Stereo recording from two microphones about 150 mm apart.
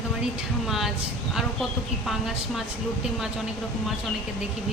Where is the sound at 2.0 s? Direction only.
Centre (ahead or behind).